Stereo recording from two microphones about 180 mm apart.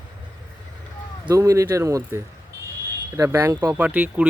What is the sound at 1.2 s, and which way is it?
Speech, 20° right (ahead or behind).